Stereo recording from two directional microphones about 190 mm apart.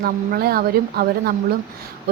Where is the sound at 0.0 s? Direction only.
55° right (ahead or behind).